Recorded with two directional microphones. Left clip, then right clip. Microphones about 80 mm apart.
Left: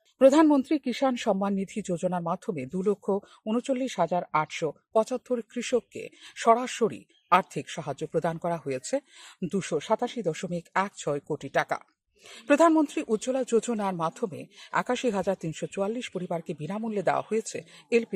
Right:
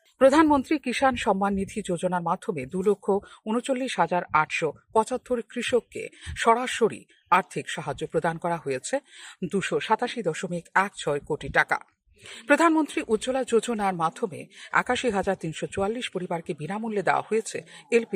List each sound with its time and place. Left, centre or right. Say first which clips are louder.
0.2 s speech: right 1 dB; centre
10.4 s speech: right 2 dB; centre
10.9 s speech: right 3 dB; left
14.3 s speech: right 4 dB; centre